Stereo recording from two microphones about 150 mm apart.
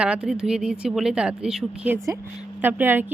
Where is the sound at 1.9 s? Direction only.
20° right (ahead or behind).